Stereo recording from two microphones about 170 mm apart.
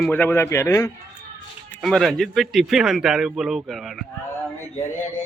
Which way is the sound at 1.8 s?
Centre (ahead or behind).